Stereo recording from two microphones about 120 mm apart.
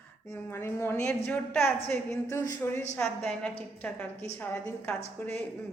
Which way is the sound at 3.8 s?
15° left (ahead or behind).